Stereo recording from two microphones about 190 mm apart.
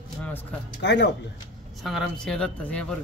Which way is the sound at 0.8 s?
65° left (ahead or behind).